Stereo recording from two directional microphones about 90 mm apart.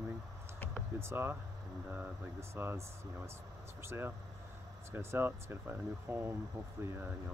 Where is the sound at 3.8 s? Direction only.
25° right (ahead or behind).